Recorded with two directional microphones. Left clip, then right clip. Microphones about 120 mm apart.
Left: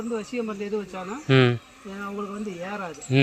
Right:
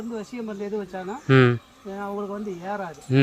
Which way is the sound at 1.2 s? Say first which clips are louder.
Right 2 dB; 45° right (ahead or behind).